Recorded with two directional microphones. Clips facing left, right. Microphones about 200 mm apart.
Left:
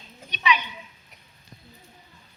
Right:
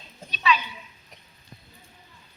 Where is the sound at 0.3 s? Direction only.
20° left (ahead or behind).